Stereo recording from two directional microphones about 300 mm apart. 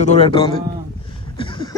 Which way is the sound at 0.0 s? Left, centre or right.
Left.